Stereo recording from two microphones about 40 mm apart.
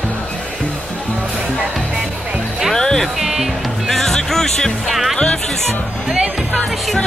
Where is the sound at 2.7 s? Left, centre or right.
Centre.